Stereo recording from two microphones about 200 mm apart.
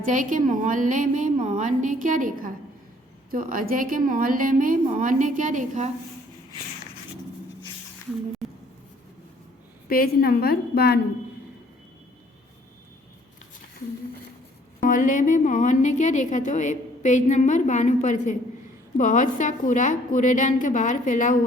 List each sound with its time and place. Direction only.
0.0 s a woman's voice: 40° right (ahead or behind)
9.9 s a woman's voice: 50° left (ahead or behind)
14.8 s a woman's voice: 40° left (ahead or behind)